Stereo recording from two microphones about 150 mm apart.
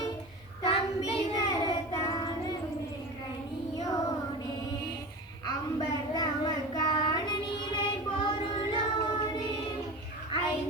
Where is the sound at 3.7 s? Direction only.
25° left (ahead or behind).